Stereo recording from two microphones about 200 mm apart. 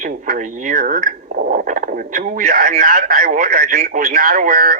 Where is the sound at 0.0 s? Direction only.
45° right (ahead or behind).